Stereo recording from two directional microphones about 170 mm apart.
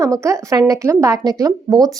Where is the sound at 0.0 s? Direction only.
20° right (ahead or behind).